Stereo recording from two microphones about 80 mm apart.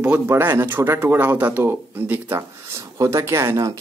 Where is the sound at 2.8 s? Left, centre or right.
Right.